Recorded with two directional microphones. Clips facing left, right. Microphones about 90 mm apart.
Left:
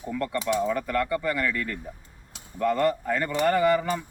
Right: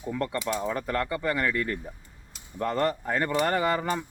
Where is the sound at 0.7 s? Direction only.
30° right (ahead or behind).